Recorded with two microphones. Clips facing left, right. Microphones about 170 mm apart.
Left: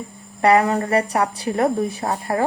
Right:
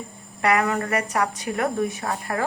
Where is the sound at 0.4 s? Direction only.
35° left (ahead or behind).